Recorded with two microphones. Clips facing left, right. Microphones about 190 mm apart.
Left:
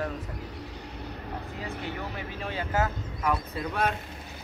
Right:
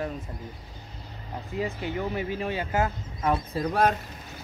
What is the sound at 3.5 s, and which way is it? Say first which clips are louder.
Speech: right 5 dB; 40° right (ahead or behind).